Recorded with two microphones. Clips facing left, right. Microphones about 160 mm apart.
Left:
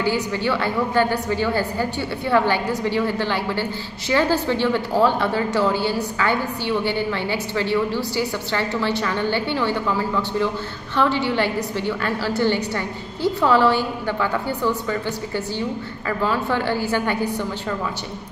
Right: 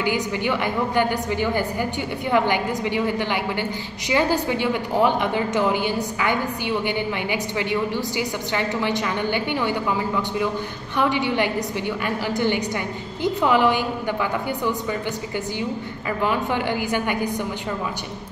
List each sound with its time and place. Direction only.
0.0 s a woman's voice: 15° right (ahead or behind)